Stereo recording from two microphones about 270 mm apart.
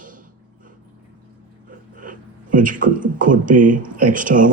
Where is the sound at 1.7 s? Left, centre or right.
Right.